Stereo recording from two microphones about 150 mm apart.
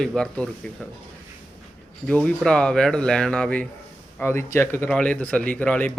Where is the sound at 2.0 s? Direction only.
5° left (ahead or behind).